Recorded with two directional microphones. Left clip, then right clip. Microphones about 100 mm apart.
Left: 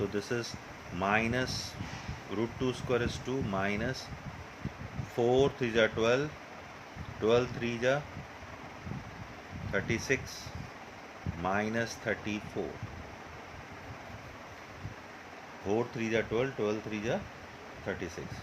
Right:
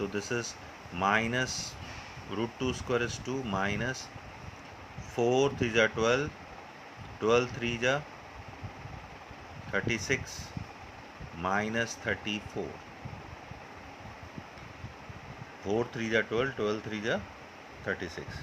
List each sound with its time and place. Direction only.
0.1 s speech: 20° right (ahead or behind)
5.1 s speech: 20° right (ahead or behind)
9.7 s speech: 20° right (ahead or behind)
11.4 s speech: 15° right (ahead or behind)
15.6 s speech: 25° right (ahead or behind)